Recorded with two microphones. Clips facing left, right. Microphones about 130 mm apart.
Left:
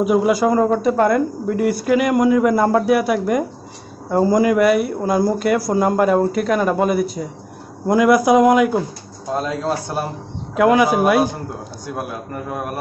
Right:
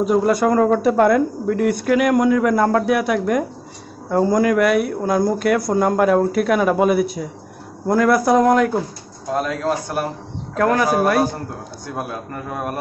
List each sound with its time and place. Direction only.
0.0 s speech: 5° left (ahead or behind)
7.9 s speech: 15° left (ahead or behind)
9.3 s a man's voice: 25° left (ahead or behind)
10.5 s speech: 10° left (ahead or behind)